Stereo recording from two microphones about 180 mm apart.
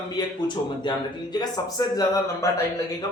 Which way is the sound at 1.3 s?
20° left (ahead or behind).